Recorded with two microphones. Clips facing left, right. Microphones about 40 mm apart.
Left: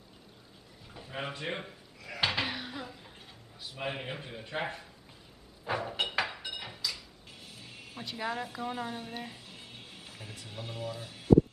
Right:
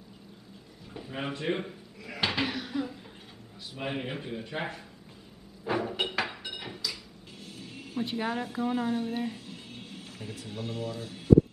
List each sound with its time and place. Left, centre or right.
0.9 s a sound: centre
3.7 s speech: centre
5.7 s a sound: centre
7.4 s music: centre
8.0 s speech: centre
8.3 s speech: centre